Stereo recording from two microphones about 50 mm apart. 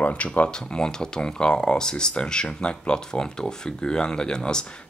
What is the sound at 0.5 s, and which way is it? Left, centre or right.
Speech, centre.